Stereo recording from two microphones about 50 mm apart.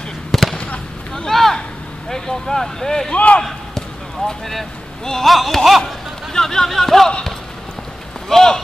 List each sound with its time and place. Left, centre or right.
0.3 s fireworks: centre
0.6 s fireworks: centre
1.3 s speech: centre
3.1 s speech: left
4.3 s speech: centre
6.3 s speech: centre
7.1 s speech: centre
8.3 s speech: centre